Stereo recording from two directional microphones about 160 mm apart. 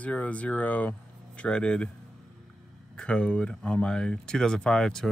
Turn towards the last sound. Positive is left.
turn(degrees=5)  # may be behind; listen again after turning